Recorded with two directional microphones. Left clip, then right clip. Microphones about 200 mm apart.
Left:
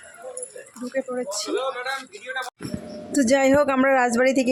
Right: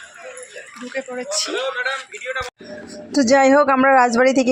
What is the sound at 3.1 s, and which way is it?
A woman's voice, centre (ahead or behind).